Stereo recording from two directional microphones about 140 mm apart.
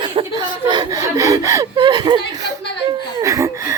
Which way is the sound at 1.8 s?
30° right (ahead or behind).